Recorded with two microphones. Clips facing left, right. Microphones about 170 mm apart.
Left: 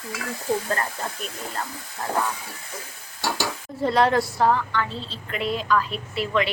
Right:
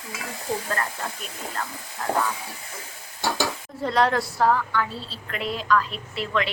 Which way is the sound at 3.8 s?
5° left (ahead or behind).